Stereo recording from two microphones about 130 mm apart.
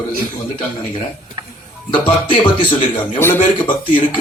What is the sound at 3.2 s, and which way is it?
Speech, 20° left (ahead or behind).